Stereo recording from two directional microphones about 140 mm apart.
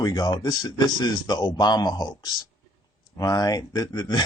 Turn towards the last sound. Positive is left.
turn(degrees=30)  # may be behind; listen again after turning